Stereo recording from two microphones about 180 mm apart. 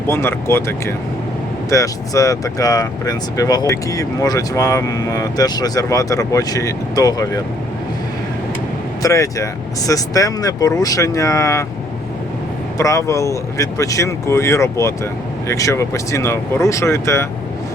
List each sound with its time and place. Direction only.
0.1 s speech: 15° left (ahead or behind)
9.0 s speech: 20° left (ahead or behind)
12.7 s speech: 15° left (ahead or behind)